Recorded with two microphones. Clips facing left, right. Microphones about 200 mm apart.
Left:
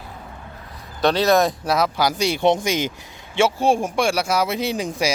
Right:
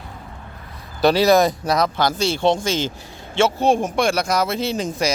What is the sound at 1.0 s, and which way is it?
Speech, centre (ahead or behind).